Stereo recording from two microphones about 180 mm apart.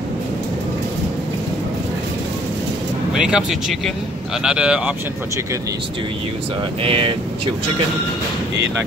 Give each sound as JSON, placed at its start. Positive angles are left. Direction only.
{"t": 3.2, "sound": "speech", "side_deg": -5}
{"t": 6.8, "sound": "speech", "side_deg": -30}